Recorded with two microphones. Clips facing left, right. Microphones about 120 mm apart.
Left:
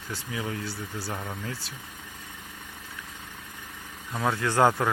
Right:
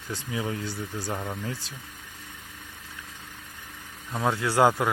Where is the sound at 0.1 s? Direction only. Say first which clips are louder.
Right 2 dB; 25° right (ahead or behind).